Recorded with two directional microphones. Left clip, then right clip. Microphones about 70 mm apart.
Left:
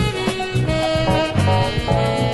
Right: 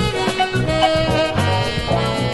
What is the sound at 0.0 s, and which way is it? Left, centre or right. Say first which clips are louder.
Music: right 3 dB; left.